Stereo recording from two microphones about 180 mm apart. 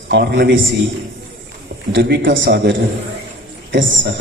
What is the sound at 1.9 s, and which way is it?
Speech, 70° right (ahead or behind).